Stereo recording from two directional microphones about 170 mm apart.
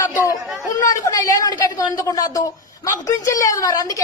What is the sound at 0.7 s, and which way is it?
A woman's voice, 20° left (ahead or behind).